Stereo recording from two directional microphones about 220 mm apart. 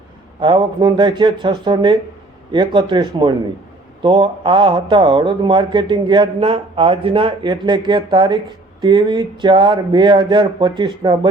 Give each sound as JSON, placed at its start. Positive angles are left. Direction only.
{"t": 0.3, "sound": "speech", "side_deg": -20}